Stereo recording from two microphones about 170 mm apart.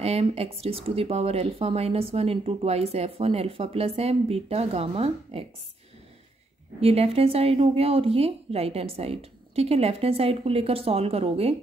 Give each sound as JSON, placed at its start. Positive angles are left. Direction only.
{"t": 0.0, "sound": "speech", "side_deg": -35}
{"t": 6.8, "sound": "speech", "side_deg": -35}